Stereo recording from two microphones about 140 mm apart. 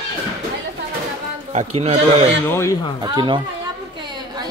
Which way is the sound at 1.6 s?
45° right (ahead or behind).